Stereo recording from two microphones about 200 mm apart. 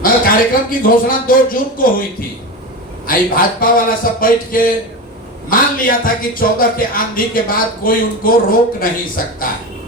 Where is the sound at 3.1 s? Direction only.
45° left (ahead or behind).